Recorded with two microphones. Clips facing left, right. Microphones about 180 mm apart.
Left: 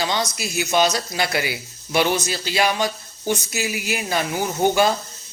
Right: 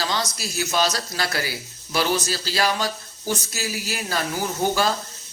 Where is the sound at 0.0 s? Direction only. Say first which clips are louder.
Left 3 dB; 20° left (ahead or behind).